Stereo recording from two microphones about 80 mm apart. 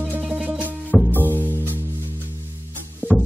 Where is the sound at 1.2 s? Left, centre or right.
Right.